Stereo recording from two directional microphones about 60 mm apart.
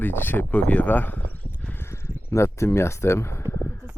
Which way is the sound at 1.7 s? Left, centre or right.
Left.